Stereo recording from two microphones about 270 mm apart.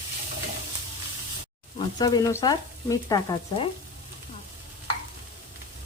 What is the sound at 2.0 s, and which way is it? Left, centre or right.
Speech, centre.